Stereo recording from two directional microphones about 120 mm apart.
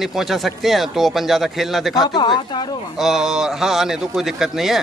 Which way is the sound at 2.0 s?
40° left (ahead or behind).